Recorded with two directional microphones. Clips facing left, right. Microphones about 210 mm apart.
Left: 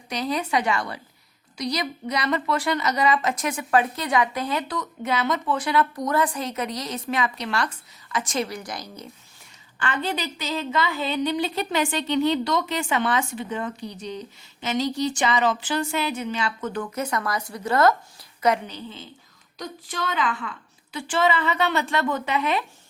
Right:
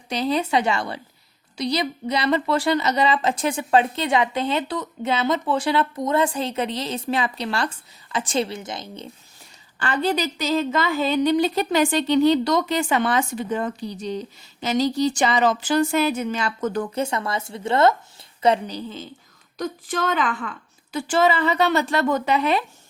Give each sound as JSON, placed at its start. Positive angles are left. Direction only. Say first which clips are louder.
{"t": 0.1, "sound": "a woman's voice", "louder": "right 4 dB", "side_deg": -30}
{"t": 9.7, "sound": "a woman's voice", "louder": "right 5 dB", "side_deg": -35}
{"t": 19.5, "sound": "a woman's voice", "louder": "right 6 dB", "side_deg": -50}